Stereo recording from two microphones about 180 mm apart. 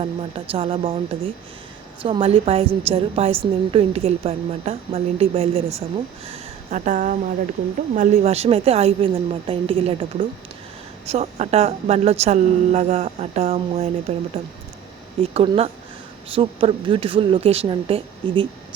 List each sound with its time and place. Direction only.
0.0 s a woman's voice: 30° right (ahead or behind)
2.0 s a woman's voice: 30° right (ahead or behind)